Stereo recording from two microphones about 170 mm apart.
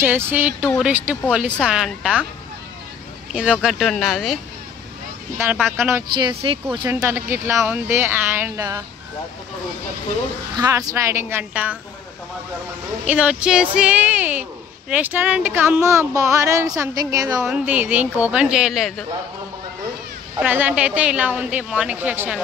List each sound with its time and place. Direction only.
0.0 s speech: 10° right (ahead or behind)
3.3 s speech: 5° right (ahead or behind)
5.7 s speech: 15° right (ahead or behind)
6.1 s speech: 30° right (ahead or behind)
6.9 s speech: 15° right (ahead or behind)
10.5 s speech: 20° right (ahead or behind)
13.0 s speech: 5° right (ahead or behind)
17.5 s speech: 5° right (ahead or behind)
20.3 s speech: 10° right (ahead or behind)